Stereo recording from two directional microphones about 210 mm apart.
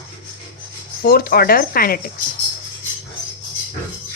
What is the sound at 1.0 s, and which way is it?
Speech, 45° left (ahead or behind).